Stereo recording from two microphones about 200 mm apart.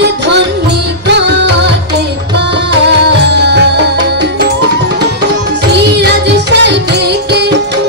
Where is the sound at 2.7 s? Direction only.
60° right (ahead or behind).